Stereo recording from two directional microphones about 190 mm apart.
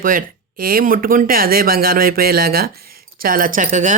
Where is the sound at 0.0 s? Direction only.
45° right (ahead or behind).